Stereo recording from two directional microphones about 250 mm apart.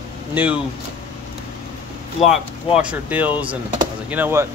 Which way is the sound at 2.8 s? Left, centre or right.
Centre.